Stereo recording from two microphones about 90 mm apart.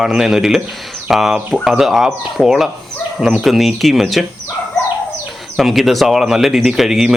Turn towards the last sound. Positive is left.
turn(degrees=-5)  # may be behind; listen again after turning